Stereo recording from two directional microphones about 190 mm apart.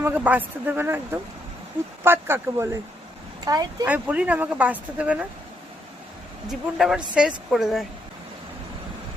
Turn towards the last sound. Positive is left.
turn(degrees=0)  # may be behind; listen again after turning